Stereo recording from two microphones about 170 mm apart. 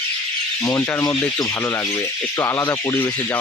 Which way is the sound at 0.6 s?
15° left (ahead or behind).